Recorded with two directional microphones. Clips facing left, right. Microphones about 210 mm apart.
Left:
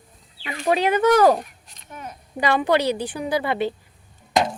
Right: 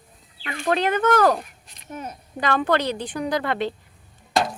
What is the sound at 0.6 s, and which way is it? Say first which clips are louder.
A woman's voice: left 2 dB; 10° left (ahead or behind).